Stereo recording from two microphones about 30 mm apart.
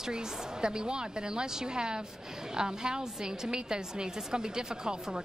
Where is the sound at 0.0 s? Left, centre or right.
Right.